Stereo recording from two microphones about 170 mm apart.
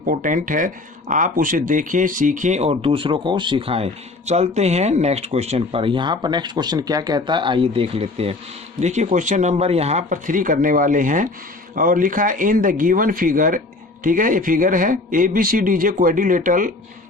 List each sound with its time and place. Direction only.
0.0 s speech: 55° right (ahead or behind)